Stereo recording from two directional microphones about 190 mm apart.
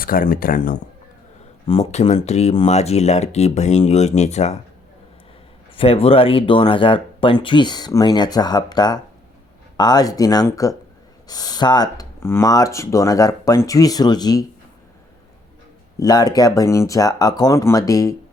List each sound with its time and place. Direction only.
0.0 s speech: 50° left (ahead or behind)
1.6 s speech: 30° left (ahead or behind)
5.7 s speech: 30° left (ahead or behind)
16.0 s speech: 20° left (ahead or behind)